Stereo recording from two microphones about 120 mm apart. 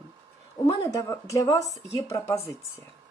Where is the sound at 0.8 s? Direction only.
25° left (ahead or behind).